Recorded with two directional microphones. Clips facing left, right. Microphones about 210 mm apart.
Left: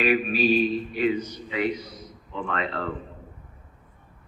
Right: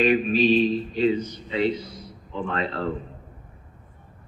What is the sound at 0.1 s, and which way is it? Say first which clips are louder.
Speech: right 3 dB; 10° left (ahead or behind).